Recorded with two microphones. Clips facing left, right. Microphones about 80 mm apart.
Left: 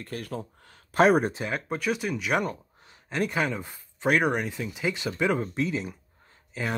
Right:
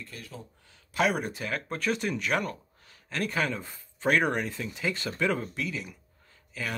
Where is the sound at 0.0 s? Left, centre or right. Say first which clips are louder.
Left 9 dB; left.